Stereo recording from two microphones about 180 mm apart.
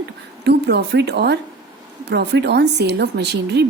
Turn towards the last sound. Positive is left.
turn(degrees=-65)  # may be behind; listen again after turning